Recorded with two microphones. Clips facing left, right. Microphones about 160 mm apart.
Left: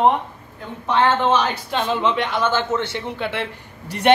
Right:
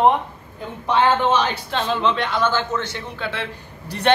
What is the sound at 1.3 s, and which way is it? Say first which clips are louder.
Speech: left 1 dB; 10° left (ahead or behind).